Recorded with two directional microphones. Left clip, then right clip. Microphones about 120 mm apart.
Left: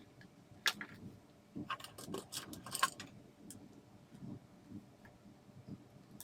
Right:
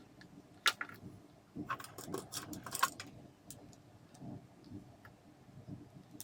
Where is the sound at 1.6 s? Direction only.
15° left (ahead or behind).